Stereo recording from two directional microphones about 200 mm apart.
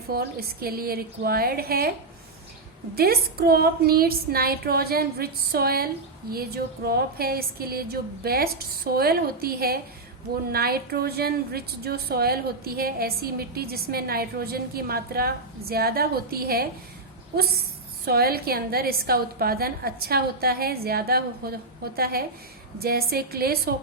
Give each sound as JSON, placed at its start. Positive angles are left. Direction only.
{"t": 0.1, "sound": "a woman's voice", "side_deg": -50}
{"t": 2.9, "sound": "a woman's voice", "side_deg": -50}